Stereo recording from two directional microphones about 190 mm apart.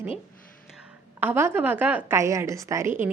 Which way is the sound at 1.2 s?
10° right (ahead or behind).